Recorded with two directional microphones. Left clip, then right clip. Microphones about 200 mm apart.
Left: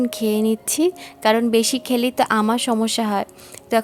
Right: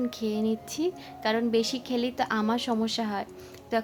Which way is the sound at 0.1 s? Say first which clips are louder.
Left 9 dB; 40° left (ahead or behind).